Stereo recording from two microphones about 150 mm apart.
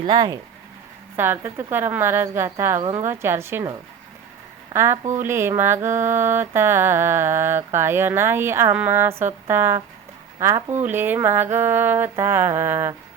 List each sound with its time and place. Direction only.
0.0 s speech: 30° right (ahead or behind)
1.1 s mantra: 15° right (ahead or behind)
4.7 s mantra: 15° right (ahead or behind)